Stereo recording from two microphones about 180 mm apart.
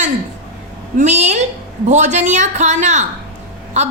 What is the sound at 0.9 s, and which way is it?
A woman's voice, 35° right (ahead or behind).